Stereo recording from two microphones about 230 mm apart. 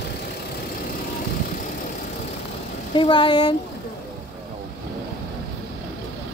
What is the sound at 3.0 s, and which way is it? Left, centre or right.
Speech, left.